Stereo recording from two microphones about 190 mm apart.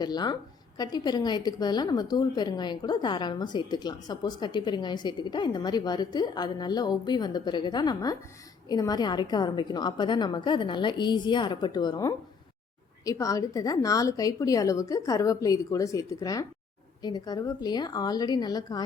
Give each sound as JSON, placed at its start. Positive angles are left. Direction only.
{"t": 0.0, "sound": "a woman's voice", "side_deg": 20}